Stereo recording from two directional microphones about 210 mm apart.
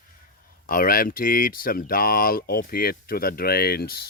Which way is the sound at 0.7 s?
40° left (ahead or behind).